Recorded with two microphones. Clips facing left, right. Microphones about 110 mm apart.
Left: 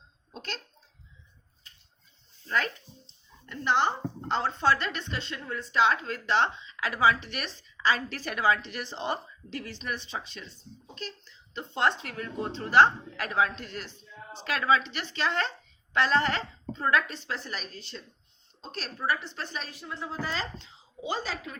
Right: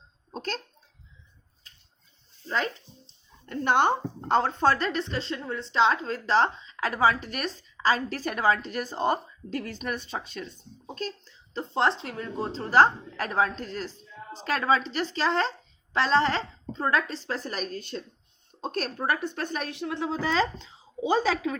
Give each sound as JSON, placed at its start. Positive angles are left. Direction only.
{"t": 0.3, "sound": "a sound", "side_deg": -45}
{"t": 3.1, "sound": "a woman's voice", "side_deg": -45}
{"t": 19.7, "sound": "speech", "side_deg": -70}